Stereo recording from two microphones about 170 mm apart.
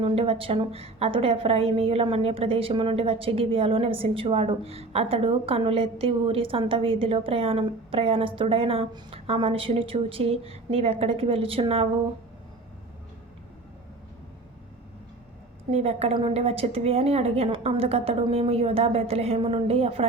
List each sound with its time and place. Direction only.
0.0 s a woman's voice: 35° right (ahead or behind)
15.7 s a woman's voice: 40° right (ahead or behind)